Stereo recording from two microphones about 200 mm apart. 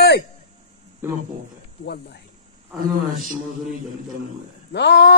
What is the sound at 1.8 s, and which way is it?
Speech, 55° left (ahead or behind).